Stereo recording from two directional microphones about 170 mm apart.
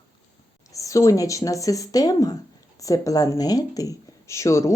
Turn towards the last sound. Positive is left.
turn(degrees=15)  # may be behind; listen again after turning